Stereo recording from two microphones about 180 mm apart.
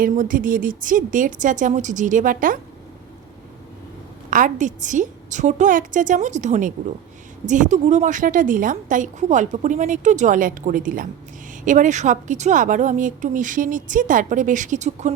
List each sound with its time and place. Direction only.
0.0 s a woman's voice: 50° right (ahead or behind)
4.3 s a woman's voice: 45° right (ahead or behind)